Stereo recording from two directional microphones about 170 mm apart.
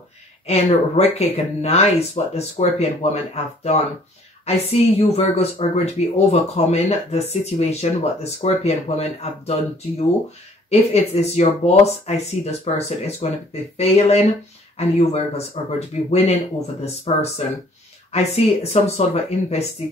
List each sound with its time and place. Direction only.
0.5 s speech: 40° left (ahead or behind)
4.5 s speech: 35° left (ahead or behind)